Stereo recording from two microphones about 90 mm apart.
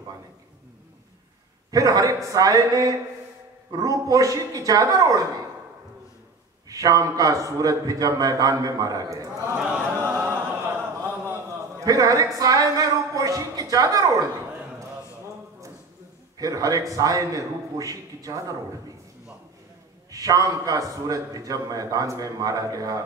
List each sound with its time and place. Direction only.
1.7 s a man's voice: 40° right (ahead or behind)
6.7 s a man's voice: 40° right (ahead or behind)
9.6 s a sound: 15° right (ahead or behind)
9.9 s a capella: 20° right (ahead or behind)
11.8 s a man's voice: 40° right (ahead or behind)
16.3 s a man's voice: 40° right (ahead or behind)
20.1 s a man's voice: 40° right (ahead or behind)